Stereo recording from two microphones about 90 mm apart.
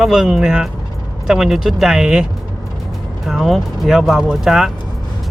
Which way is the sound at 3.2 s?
5° right (ahead or behind).